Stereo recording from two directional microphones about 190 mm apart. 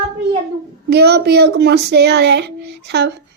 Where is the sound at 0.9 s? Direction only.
60° right (ahead or behind).